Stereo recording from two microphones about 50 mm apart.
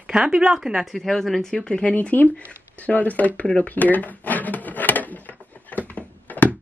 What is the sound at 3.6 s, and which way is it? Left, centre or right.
Drawer open or close, left.